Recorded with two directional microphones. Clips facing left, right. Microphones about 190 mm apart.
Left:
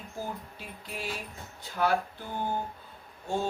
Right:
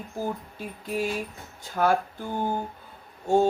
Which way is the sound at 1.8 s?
65° right (ahead or behind).